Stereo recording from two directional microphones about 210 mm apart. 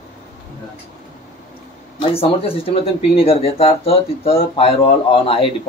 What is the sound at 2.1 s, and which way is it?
Speech, 25° left (ahead or behind).